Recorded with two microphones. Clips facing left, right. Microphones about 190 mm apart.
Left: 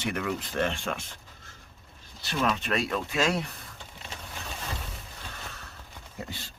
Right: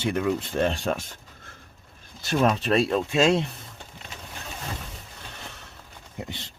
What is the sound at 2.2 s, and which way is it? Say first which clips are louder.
Speech: right 6 dB; 40° right (ahead or behind).